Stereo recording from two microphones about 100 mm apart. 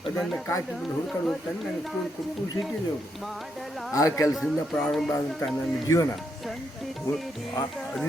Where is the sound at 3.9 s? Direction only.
30° left (ahead or behind).